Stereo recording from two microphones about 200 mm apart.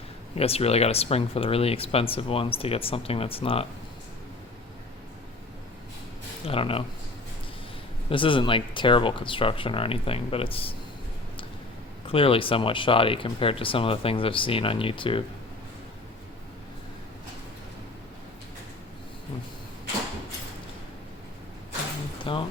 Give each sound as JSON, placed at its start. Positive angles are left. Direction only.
{"t": 0.3, "sound": "speech", "side_deg": 30}
{"t": 6.5, "sound": "speech", "side_deg": 30}
{"t": 8.1, "sound": "speech", "side_deg": 25}
{"t": 12.0, "sound": "speech", "side_deg": 25}
{"t": 22.2, "sound": "rain", "side_deg": 25}